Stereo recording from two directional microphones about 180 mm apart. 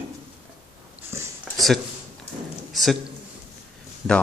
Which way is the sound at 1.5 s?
Centre (ahead or behind).